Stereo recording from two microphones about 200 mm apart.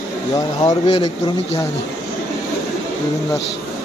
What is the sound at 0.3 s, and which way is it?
Speech, 20° left (ahead or behind).